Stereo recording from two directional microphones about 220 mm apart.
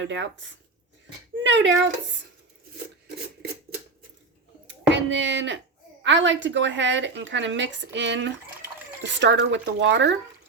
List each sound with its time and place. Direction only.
0.0 s a woman's voice: 55° right (ahead or behind)
1.5 s a woman's voice: 55° right (ahead or behind)
4.6 s a sound: 55° right (ahead or behind)
6.0 s a woman's voice: 55° right (ahead or behind)